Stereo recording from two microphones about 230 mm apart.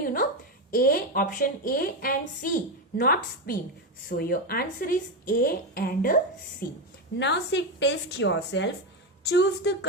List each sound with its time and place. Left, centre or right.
0.0 s a sound: left
0.7 s a woman's voice: left
7.2 s a woman's voice: left